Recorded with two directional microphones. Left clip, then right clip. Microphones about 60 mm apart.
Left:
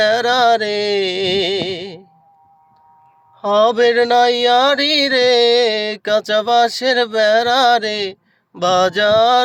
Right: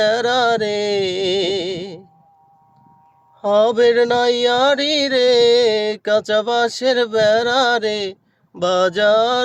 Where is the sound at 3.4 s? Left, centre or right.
Centre.